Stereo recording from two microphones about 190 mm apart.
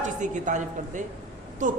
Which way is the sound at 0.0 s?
40° right (ahead or behind).